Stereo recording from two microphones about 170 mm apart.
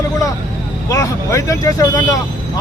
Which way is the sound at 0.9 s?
20° left (ahead or behind).